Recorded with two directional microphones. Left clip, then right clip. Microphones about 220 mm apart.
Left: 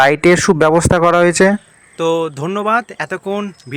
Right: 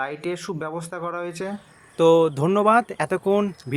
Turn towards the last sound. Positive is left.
turn(degrees=0)  # may be behind; listen again after turning